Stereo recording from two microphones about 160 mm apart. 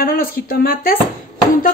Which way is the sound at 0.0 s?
65° left (ahead or behind).